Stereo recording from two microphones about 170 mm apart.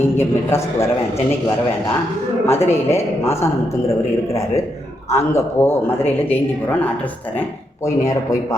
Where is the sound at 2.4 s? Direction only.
15° left (ahead or behind).